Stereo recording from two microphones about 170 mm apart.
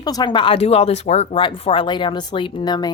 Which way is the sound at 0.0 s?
25° left (ahead or behind).